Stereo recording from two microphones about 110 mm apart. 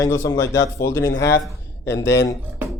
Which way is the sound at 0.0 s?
25° left (ahead or behind).